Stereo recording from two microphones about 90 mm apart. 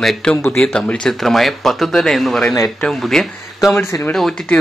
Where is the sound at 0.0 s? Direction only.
Centre (ahead or behind).